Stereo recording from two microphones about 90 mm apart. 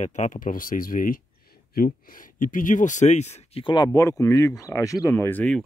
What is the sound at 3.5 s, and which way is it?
Speech, 65° left (ahead or behind).